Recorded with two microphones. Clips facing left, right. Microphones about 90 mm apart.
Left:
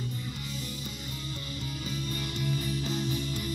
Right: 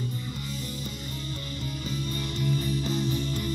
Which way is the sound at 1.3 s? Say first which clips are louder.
Right 2 dB; 45° right (ahead or behind).